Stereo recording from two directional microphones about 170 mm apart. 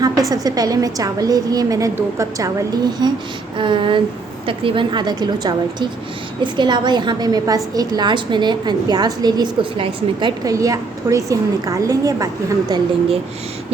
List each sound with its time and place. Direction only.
0.0 s a woman's voice: 20° right (ahead or behind)